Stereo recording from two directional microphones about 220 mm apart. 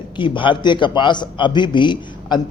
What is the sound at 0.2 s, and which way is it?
A man's voice, 20° left (ahead or behind).